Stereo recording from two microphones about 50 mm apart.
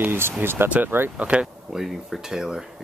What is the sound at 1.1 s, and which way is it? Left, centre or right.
Speech, right.